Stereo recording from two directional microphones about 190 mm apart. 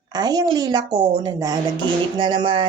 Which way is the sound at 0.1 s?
20° right (ahead or behind).